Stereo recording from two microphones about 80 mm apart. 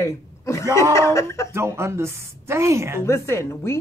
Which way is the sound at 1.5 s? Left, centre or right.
Right.